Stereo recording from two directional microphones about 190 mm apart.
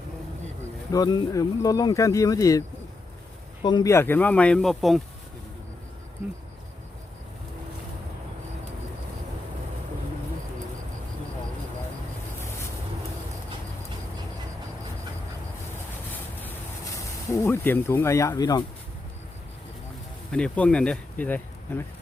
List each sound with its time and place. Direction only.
0.9 s speech: 20° left (ahead or behind); by 5.0 s centre (ahead or behind)
17.3 s speech: 10° left (ahead or behind)
20.3 s speech: 5° left (ahead or behind)